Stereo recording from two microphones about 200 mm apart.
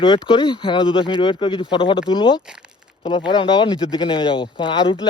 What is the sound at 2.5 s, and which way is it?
Crumpling, 5° right (ahead or behind).